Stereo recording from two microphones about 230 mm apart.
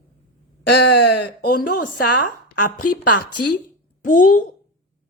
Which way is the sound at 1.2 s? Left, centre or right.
Left.